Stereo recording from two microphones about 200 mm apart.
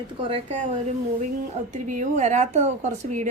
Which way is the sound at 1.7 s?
40° right (ahead or behind).